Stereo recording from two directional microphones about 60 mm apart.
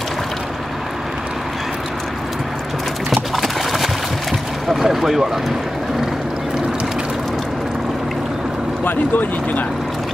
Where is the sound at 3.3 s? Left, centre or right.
Centre.